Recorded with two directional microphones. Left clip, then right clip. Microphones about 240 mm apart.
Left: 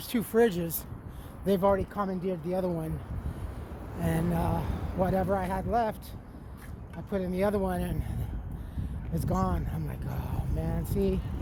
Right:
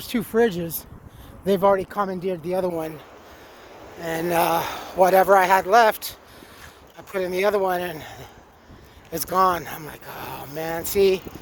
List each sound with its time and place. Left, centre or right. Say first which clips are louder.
0.0 s speech: right 5 dB; right
1.5 s speech: right 7 dB; right
4.3 s speech: right 12 dB; right
9.1 s speech: right 13 dB; right